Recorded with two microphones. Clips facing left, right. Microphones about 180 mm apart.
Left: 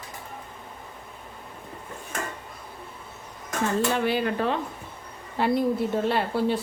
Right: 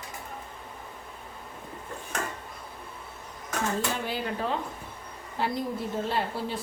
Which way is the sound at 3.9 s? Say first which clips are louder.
Left 7 dB; 70° left (ahead or behind).